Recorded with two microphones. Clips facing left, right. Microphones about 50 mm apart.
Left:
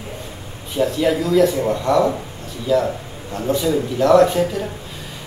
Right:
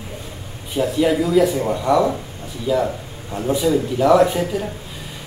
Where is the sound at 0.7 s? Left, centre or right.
Centre.